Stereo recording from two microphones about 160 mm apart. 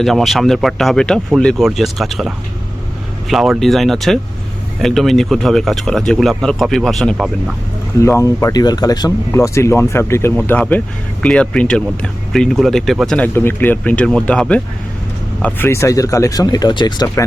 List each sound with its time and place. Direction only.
0.0 s speech: centre (ahead or behind)
8.0 s speech: 15° left (ahead or behind)